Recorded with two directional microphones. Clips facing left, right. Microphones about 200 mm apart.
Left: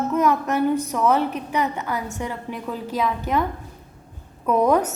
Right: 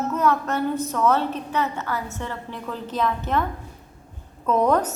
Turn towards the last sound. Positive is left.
turn(degrees=10)  # may be behind; listen again after turning